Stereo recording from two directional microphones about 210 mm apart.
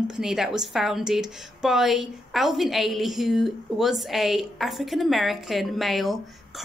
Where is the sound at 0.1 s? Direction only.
Centre (ahead or behind).